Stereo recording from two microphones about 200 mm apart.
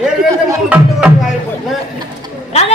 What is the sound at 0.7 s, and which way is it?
Music, 10° right (ahead or behind).